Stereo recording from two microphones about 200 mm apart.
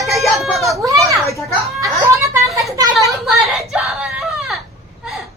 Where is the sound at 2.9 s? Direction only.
Centre (ahead or behind).